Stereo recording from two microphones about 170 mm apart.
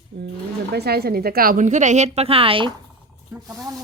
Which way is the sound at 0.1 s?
90° right.